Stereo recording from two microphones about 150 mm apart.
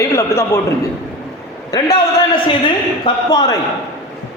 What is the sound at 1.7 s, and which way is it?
Speech, 25° left (ahead or behind).